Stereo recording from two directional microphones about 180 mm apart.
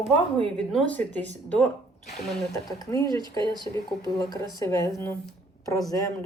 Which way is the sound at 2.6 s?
20° left (ahead or behind).